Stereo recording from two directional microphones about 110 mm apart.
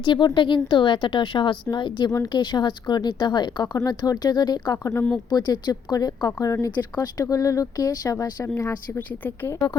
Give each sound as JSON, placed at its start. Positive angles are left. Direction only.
{"t": 0.0, "sound": "a woman's voice", "side_deg": 45}
{"t": 9.0, "sound": "a woman's voice", "side_deg": 15}